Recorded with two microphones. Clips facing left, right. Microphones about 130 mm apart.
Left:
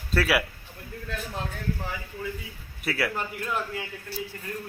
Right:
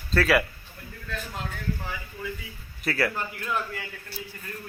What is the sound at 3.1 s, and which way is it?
Speech, 15° left (ahead or behind).